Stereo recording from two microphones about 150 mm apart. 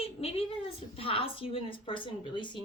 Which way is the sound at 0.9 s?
40° left (ahead or behind).